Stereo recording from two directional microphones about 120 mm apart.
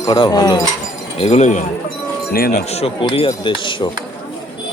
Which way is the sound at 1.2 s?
65° left (ahead or behind).